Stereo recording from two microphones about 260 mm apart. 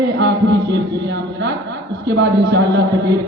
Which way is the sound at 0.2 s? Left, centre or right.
Right.